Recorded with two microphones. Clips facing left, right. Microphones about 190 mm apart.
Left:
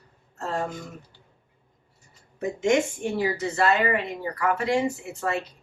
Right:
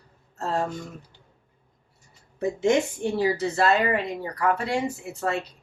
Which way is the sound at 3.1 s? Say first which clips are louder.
Right 2 dB; 35° right (ahead or behind).